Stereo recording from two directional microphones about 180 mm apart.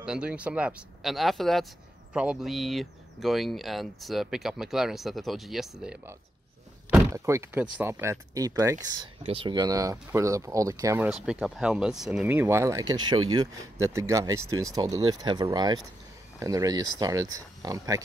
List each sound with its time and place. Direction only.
0.0 s speech: 5° right (ahead or behind)
6.9 s speech: 15° right (ahead or behind)
11.1 s speech: 5° right (ahead or behind); by 18.0 s 20° right (ahead or behind)